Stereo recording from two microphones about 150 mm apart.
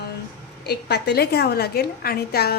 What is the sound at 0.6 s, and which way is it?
A woman's voice, 90° left.